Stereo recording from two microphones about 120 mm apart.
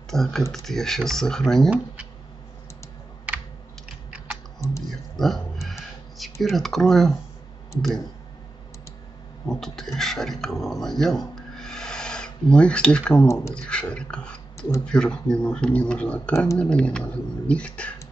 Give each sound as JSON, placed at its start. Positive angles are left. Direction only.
{"t": 0.1, "sound": "speech", "side_deg": 5}
{"t": 5.1, "sound": "a sound", "side_deg": 0}
{"t": 6.4, "sound": "speech", "side_deg": 0}
{"t": 9.5, "sound": "speech", "side_deg": 5}
{"t": 11.3, "sound": "a sound", "side_deg": 5}
{"t": 13.3, "sound": "speech", "side_deg": 25}
{"t": 13.6, "sound": "speech", "side_deg": 10}